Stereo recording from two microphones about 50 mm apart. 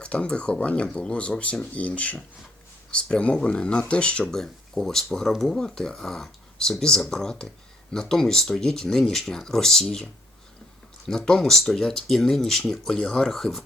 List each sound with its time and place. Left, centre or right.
0.0 s speech: left
4.3 s speech: centre
11.1 s speech: centre